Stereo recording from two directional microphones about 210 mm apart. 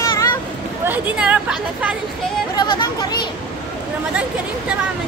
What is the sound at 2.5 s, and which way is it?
Speech, 20° left (ahead or behind).